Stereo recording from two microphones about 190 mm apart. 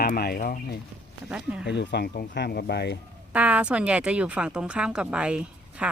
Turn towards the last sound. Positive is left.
turn(degrees=-5)  # may be behind; listen again after turning